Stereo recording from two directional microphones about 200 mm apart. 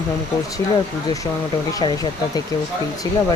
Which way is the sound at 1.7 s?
20° left (ahead or behind).